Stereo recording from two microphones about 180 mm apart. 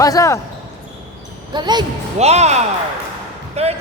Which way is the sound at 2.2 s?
35° right (ahead or behind).